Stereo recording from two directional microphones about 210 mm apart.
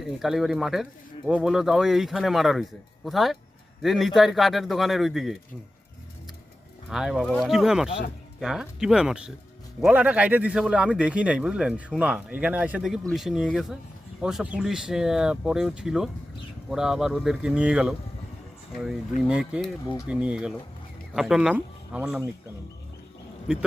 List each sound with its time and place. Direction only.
0.0 s a man's voice: centre (ahead or behind)
6.9 s a man's voice: 5° right (ahead or behind)
19.3 s a man's voice: 5° right (ahead or behind)